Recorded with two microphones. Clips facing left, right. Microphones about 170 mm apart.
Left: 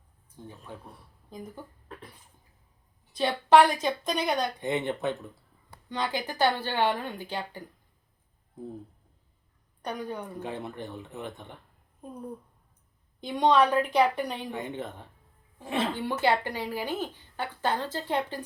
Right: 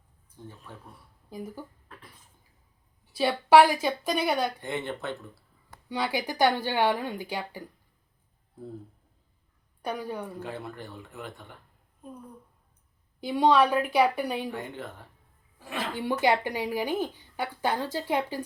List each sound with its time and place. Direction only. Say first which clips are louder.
0.4 s speech: even; 15° left (ahead or behind)
1.3 s speech: right 3 dB; 5° right (ahead or behind)
3.1 s speech: right 1 dB; 10° right (ahead or behind)
4.6 s speech: left 4 dB; 15° left (ahead or behind)
5.9 s speech: right 2 dB; 10° right (ahead or behind)
9.8 s speech: right 1 dB; 10° right (ahead or behind)
10.4 s speech: left 2 dB; 20° left (ahead or behind)
13.2 s speech: right 1 dB; 5° right (ahead or behind)
14.5 s speech: left 2 dB; 20° left (ahead or behind)
16.0 s speech: right 5 dB; 15° right (ahead or behind)